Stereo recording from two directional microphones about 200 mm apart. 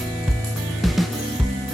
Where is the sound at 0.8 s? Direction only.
Centre (ahead or behind).